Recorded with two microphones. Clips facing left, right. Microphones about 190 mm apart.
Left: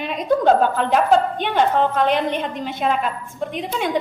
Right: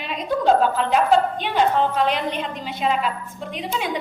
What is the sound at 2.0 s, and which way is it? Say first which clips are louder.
A woman's voice: left 3 dB; 50° left (ahead or behind).